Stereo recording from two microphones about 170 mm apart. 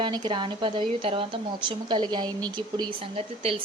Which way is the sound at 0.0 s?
30° right (ahead or behind).